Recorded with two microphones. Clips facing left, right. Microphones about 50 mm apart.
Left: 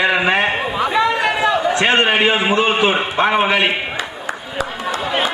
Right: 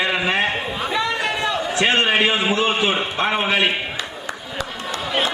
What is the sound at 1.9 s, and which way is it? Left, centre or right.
A man's voice, centre.